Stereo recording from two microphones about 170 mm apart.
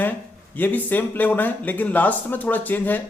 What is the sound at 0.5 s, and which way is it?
A man's voice, 10° left (ahead or behind).